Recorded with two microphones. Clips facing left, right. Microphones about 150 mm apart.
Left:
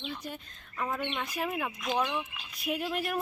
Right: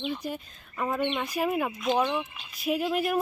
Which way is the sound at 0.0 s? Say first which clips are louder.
Right 7 dB; 10° right (ahead or behind).